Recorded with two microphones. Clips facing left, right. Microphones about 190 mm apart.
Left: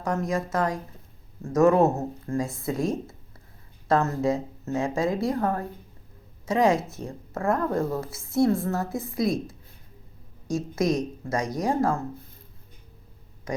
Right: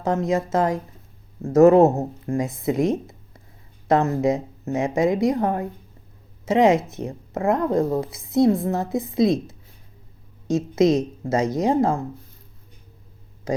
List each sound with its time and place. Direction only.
0.0 s speech: 25° right (ahead or behind)